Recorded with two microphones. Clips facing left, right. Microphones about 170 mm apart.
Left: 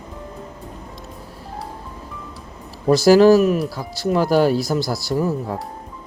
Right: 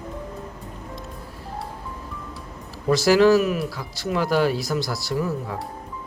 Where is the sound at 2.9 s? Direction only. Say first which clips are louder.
Left 5 dB; 35° left (ahead or behind).